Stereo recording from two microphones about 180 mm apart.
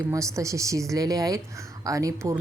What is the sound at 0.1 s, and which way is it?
Speech, 15° right (ahead or behind).